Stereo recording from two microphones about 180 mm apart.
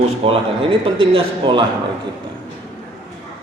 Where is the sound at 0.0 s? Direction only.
30° right (ahead or behind).